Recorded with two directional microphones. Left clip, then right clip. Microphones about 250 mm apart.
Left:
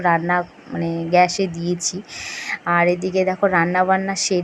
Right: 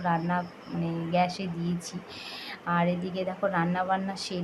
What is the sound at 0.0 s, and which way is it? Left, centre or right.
A woman's voice, left.